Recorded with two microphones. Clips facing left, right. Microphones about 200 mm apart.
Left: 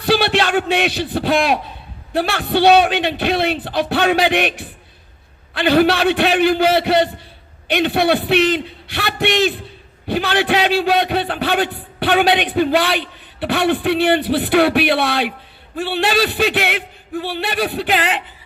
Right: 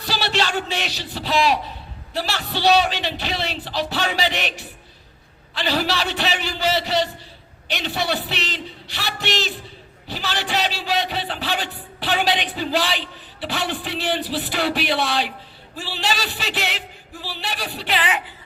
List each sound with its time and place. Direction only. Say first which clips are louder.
0.0 s a man's voice: left 8 dB; 55° left (ahead or behind)